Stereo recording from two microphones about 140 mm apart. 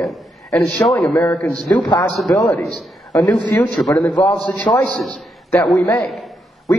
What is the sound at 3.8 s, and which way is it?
A man's voice, 10° left (ahead or behind).